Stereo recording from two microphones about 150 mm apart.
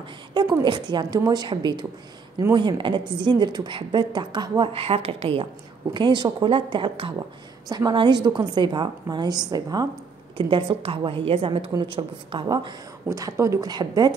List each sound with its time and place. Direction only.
0.3 s a woman's voice: 30° right (ahead or behind)
10.3 s a woman's voice: 35° right (ahead or behind)